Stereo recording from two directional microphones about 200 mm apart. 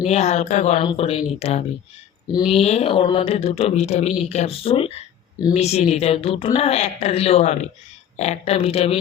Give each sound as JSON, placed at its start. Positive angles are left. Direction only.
{"t": 0.0, "sound": "speech", "side_deg": 35}